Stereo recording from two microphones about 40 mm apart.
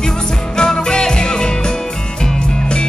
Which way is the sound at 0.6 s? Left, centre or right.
Centre.